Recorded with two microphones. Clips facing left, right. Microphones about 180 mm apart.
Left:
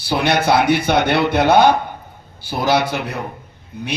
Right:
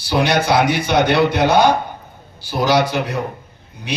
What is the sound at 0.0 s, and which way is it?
Speech, 55° left (ahead or behind).